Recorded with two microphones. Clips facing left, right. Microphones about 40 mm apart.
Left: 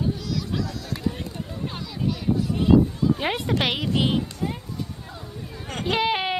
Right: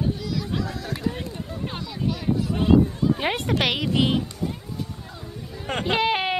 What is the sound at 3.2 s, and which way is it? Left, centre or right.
Speech, centre.